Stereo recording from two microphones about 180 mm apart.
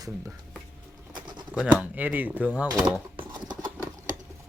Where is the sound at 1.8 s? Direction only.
10° right (ahead or behind).